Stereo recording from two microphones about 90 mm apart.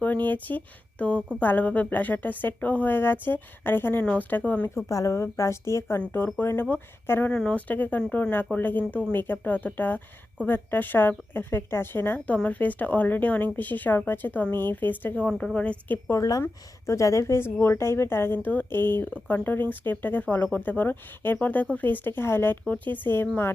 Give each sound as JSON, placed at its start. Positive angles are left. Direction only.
{"t": 0.0, "sound": "speech", "side_deg": 20}
{"t": 4.9, "sound": "a woman's voice", "side_deg": 35}
{"t": 15.3, "sound": "speech", "side_deg": 5}
{"t": 16.4, "sound": "speech", "side_deg": 35}